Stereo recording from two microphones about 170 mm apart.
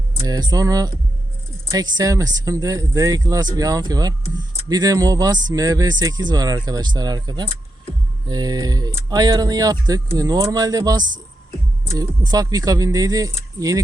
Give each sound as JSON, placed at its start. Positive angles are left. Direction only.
{"t": 0.2, "sound": "speech", "side_deg": -25}